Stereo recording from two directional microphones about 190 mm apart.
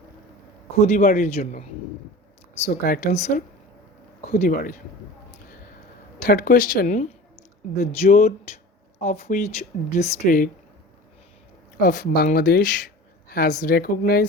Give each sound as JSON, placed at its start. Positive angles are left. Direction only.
{"t": 0.8, "sound": "speech", "side_deg": 45}
{"t": 2.6, "sound": "speech", "side_deg": 45}
{"t": 6.2, "sound": "speech", "side_deg": 45}
{"t": 11.8, "sound": "speech", "side_deg": 45}